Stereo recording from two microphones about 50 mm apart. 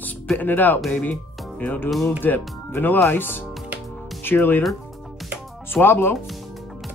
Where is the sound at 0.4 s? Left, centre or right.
Left.